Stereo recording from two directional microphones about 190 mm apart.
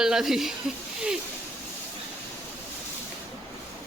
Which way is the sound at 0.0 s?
Centre (ahead or behind).